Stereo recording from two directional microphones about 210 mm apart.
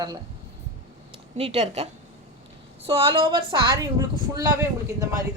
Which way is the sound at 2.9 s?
25° right (ahead or behind).